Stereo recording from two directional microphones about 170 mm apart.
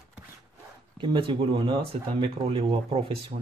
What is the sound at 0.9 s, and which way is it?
Speech, 30° right (ahead or behind).